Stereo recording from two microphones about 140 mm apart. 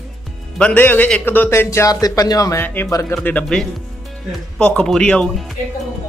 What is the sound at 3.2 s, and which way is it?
Speech, 10° left (ahead or behind).